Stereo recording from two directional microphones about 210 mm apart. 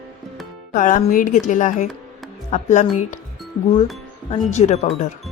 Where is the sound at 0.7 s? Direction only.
40° left (ahead or behind).